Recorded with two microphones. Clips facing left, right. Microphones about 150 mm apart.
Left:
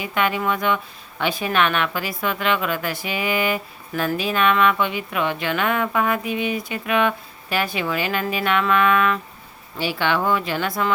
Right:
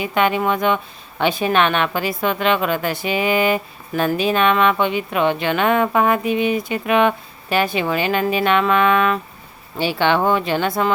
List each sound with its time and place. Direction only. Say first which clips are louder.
0.0 s a woman's voice: right 4 dB; 25° right (ahead or behind)